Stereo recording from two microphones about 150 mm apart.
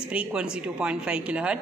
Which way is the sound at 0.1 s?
5° right (ahead or behind).